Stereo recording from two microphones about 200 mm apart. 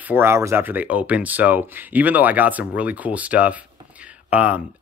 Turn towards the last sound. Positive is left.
turn(degrees=-5)  # may be behind; listen again after turning